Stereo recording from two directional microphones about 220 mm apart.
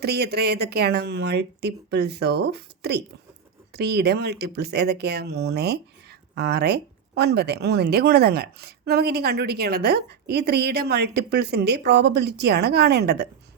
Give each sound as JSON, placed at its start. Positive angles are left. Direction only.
{"t": 0.0, "sound": "speech", "side_deg": -45}